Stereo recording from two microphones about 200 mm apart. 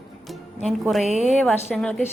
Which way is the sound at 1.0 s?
35° right (ahead or behind).